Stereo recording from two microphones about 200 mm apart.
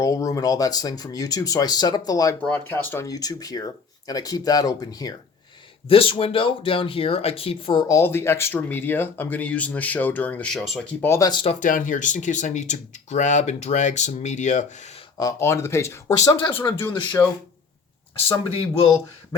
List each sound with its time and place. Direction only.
0.0 s speech: 15° left (ahead or behind); by 10.8 s centre (ahead or behind)
11.0 s speech: 15° left (ahead or behind)
11.6 s speech: 40° left (ahead or behind)
15.2 s speech: 15° left (ahead or behind)